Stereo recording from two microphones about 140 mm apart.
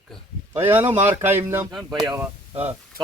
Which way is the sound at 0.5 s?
15° right (ahead or behind).